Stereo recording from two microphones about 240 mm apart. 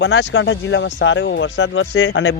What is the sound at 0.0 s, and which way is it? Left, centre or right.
Speech, left.